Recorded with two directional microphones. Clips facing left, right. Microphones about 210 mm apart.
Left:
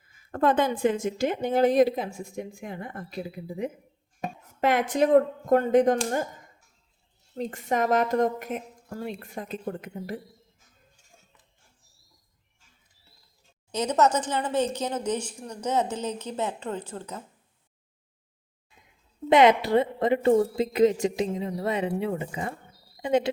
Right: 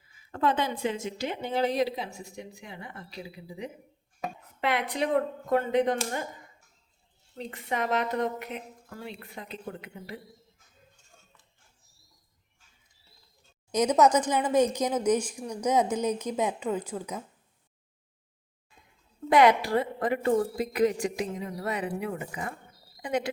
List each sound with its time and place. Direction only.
0.0 s a woman's voice: 50° left (ahead or behind)
13.7 s speech: 10° right (ahead or behind)
19.3 s a woman's voice: 20° left (ahead or behind)